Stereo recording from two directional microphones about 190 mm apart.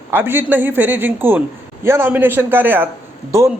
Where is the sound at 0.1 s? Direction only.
10° right (ahead or behind).